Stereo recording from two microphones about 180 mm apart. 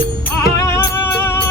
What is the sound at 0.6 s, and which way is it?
Music, 15° left (ahead or behind).